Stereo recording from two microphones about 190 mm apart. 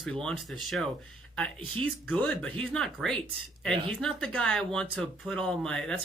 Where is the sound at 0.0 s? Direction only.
5° left (ahead or behind).